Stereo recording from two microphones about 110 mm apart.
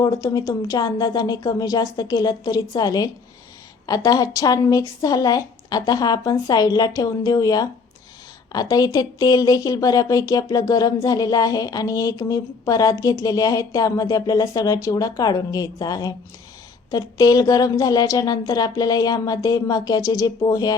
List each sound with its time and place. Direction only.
0.0 s a woman's voice: 35° left (ahead or behind)